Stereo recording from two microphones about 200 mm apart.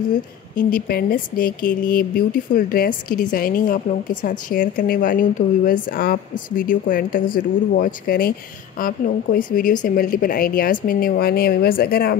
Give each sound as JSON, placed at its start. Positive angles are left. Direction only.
{"t": 0.6, "sound": "a woman's voice", "side_deg": 45}